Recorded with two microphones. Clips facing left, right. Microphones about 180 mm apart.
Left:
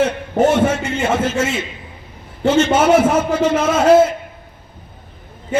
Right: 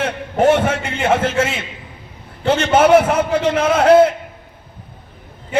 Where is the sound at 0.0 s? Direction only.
60° right (ahead or behind).